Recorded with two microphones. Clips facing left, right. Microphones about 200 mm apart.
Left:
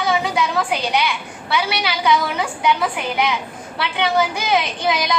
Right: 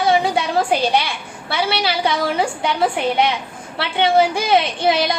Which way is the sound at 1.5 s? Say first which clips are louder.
Right 1 dB; 30° right (ahead or behind).